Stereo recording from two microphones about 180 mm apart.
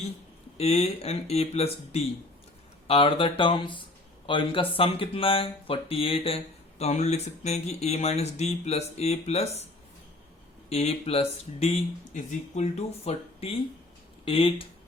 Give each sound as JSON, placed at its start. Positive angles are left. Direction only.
{"t": 0.5, "sound": "speech", "side_deg": 35}
{"t": 10.7, "sound": "speech", "side_deg": 35}